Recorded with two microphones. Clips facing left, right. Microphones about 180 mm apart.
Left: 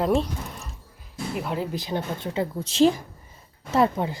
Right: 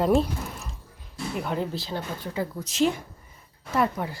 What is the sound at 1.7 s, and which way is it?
A woman's voice, 20° left (ahead or behind).